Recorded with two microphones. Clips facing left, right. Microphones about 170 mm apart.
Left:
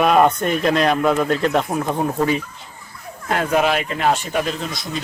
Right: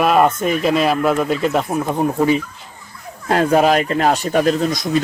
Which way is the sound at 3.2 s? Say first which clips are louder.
Right 5 dB; 35° right (ahead or behind).